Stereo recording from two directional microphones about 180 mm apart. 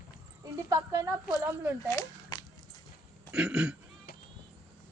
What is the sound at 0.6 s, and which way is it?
A woman's voice, 20° right (ahead or behind).